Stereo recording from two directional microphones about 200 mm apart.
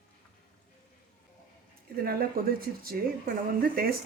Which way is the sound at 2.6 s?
50° right (ahead or behind).